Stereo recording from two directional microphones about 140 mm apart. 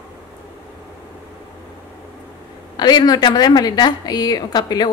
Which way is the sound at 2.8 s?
30° left (ahead or behind).